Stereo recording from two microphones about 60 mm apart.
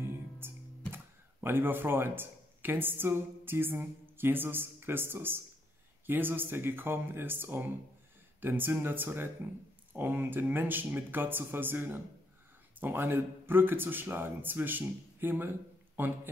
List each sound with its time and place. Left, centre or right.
0.0 s music: right
0.9 s speech: right